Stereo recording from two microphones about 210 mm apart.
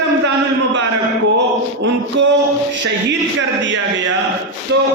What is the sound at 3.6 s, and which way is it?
Music, 60° right (ahead or behind).